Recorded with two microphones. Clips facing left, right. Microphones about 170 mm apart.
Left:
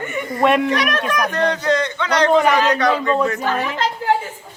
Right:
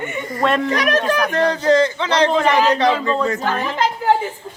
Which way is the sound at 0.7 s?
35° right (ahead or behind).